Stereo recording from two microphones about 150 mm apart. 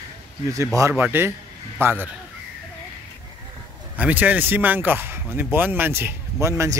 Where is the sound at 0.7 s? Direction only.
20° right (ahead or behind).